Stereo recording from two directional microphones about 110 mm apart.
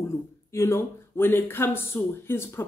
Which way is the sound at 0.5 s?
25° left (ahead or behind).